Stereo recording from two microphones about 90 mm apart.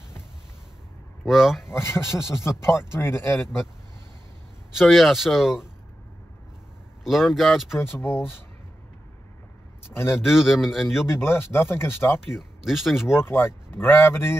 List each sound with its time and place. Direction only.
1.2 s speech: 5° right (ahead or behind)
1.6 s speech: 25° left (ahead or behind)
4.7 s speech: centre (ahead or behind)
7.1 s speech: centre (ahead or behind)
8.0 s speech: 25° left (ahead or behind)
9.8 s speech: 25° left (ahead or behind)
10.2 s speech: 5° right (ahead or behind)
11.1 s speech: 25° left (ahead or behind)
12.3 s speech: 5° right (ahead or behind)
13.2 s speech: 25° left (ahead or behind)